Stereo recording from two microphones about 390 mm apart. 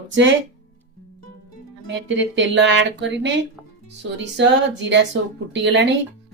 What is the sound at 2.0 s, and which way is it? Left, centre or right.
Speech, right.